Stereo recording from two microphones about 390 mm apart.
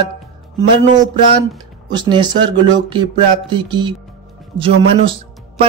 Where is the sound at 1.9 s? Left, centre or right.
Centre.